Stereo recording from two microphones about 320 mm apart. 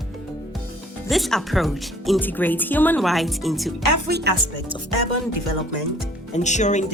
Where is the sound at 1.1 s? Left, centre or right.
Centre.